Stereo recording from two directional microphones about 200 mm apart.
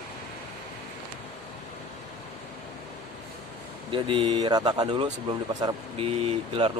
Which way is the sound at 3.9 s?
25° right (ahead or behind).